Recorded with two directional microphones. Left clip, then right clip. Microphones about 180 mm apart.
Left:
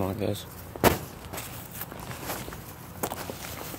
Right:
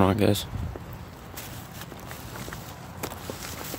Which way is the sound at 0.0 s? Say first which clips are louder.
Right 8 dB; 40° right (ahead or behind).